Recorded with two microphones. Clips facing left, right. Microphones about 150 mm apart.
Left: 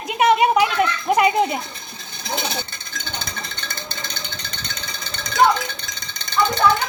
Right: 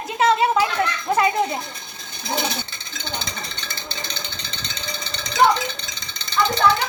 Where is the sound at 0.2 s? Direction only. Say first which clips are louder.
Left 2 dB; 15° left (ahead or behind).